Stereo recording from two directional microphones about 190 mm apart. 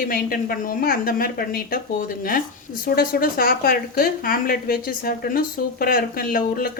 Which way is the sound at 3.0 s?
50° left (ahead or behind).